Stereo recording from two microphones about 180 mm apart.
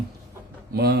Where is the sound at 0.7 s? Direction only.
65° right (ahead or behind).